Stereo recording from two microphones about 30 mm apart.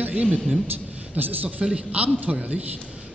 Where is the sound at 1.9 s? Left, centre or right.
Right.